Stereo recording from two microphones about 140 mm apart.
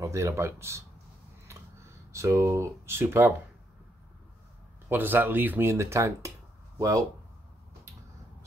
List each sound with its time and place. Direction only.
0.0 s speech: 20° right (ahead or behind)
4.8 s speech: 15° right (ahead or behind)